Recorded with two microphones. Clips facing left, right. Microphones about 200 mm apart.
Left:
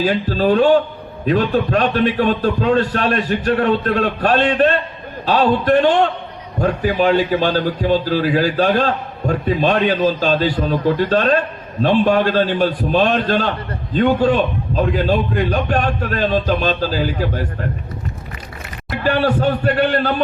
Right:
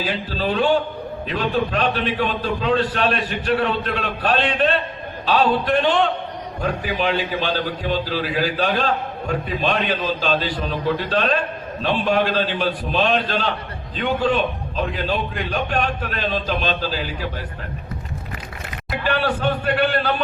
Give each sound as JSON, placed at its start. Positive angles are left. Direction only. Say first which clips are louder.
{"t": 0.0, "sound": "a man's voice", "louder": "left 7 dB", "side_deg": 45}
{"t": 19.0, "sound": "a man's voice", "louder": "left 5 dB", "side_deg": 40}